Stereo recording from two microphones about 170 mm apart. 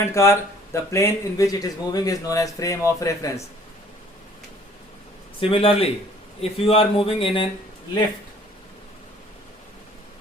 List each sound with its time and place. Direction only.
0.1 s speech: 15° left (ahead or behind)
5.4 s speech: 35° left (ahead or behind)